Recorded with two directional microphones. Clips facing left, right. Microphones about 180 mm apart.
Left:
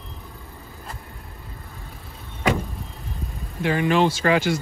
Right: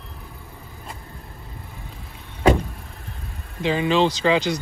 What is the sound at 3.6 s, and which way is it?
Speech, 20° right (ahead or behind).